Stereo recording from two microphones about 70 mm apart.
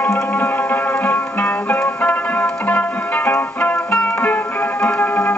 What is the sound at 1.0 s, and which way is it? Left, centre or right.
Music, left.